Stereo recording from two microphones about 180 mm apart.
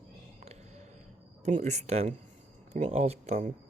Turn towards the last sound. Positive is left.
turn(degrees=-40)  # may be behind; listen again after turning